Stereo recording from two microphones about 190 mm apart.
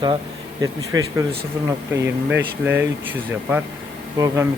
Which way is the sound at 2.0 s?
10° right (ahead or behind).